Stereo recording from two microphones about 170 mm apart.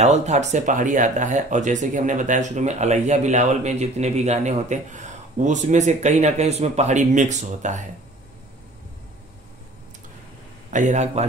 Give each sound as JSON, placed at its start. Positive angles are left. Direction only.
{"t": 0.0, "sound": "speech", "side_deg": -40}
{"t": 10.7, "sound": "speech", "side_deg": -45}